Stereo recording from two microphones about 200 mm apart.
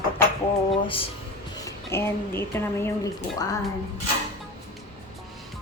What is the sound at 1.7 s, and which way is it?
Speech, 10° left (ahead or behind).